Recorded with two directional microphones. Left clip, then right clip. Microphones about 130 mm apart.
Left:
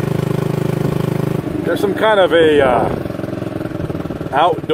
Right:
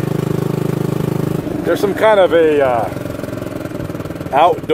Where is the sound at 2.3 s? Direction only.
15° left (ahead or behind).